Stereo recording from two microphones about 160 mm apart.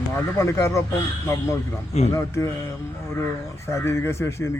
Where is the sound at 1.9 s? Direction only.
40° left (ahead or behind).